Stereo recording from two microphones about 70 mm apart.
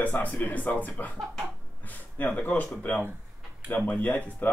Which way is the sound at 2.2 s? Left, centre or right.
Left.